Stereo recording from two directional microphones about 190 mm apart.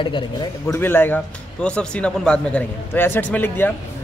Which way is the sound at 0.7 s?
10° left (ahead or behind).